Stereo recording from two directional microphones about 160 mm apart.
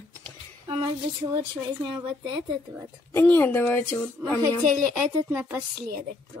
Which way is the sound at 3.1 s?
15° left (ahead or behind).